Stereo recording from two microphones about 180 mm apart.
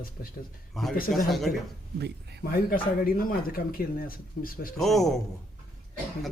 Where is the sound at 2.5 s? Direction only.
55° left (ahead or behind).